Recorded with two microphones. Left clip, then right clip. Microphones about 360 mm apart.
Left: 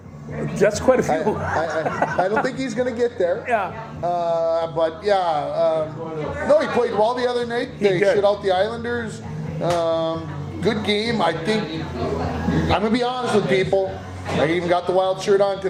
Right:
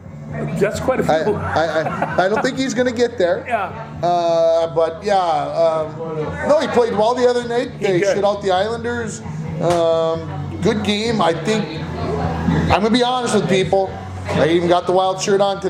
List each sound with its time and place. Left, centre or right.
0.6 s speech: left
1.1 s a man's voice: right
12.7 s a man's voice: right